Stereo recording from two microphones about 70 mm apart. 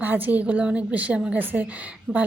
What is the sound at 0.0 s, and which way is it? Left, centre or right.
A woman's voice, right.